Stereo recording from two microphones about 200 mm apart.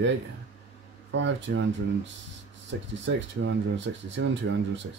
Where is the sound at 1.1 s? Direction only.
65° right (ahead or behind).